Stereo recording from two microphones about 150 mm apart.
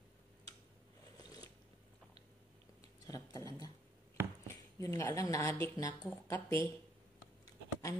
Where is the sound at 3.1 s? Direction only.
25° left (ahead or behind).